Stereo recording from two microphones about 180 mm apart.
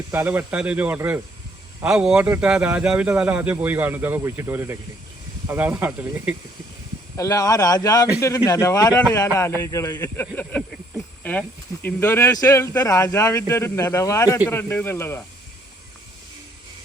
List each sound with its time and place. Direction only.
0.1 s speech: 10° right (ahead or behind)
7.2 s speech: 20° left (ahead or behind)